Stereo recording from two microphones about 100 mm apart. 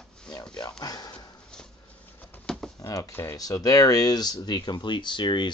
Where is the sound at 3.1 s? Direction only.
25° left (ahead or behind).